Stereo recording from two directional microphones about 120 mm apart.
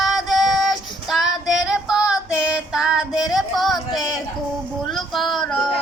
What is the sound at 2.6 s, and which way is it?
Female singing, 5° right (ahead or behind).